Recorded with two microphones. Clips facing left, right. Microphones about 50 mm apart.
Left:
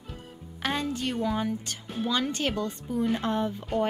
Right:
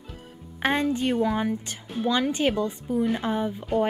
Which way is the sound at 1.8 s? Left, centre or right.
Centre.